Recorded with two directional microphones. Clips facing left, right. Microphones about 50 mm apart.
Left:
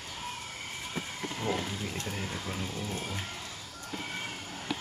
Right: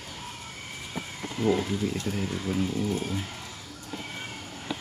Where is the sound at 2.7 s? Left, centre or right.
Centre.